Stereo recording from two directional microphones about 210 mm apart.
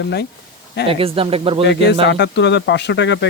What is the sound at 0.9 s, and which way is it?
Speech, 25° right (ahead or behind).